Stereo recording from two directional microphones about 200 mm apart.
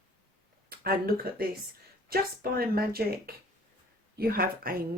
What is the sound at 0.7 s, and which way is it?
Speech, 50° right (ahead or behind).